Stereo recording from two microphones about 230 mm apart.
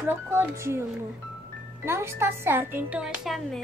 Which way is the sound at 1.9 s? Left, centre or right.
Centre.